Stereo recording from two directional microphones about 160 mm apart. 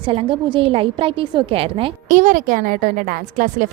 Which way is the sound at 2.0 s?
55° right (ahead or behind).